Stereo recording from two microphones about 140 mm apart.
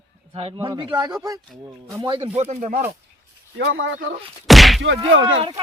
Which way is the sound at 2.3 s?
50° right (ahead or behind).